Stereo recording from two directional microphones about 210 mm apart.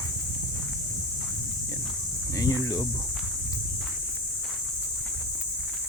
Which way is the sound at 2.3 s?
15° left (ahead or behind).